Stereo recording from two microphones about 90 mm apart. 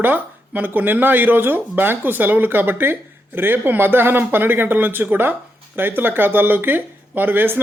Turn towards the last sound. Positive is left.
turn(degrees=-20)  # may be behind; listen again after turning